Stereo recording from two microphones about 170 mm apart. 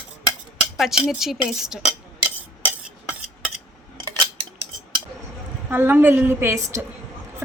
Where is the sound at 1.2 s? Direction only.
Centre (ahead or behind).